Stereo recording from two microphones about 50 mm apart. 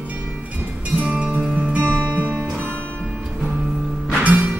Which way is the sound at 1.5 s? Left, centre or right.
Right.